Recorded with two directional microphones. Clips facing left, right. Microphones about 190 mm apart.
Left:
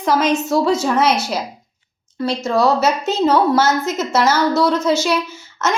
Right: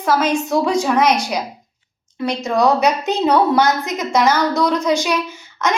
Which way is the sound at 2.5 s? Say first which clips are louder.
Right 1 dB; 15° right (ahead or behind).